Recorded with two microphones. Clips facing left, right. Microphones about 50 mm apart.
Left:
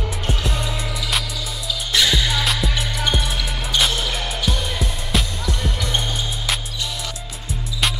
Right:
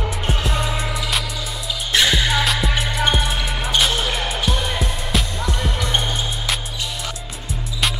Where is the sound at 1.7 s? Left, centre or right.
Right.